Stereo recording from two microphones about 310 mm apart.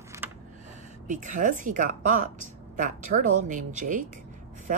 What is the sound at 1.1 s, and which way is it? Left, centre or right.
A woman's voice, right.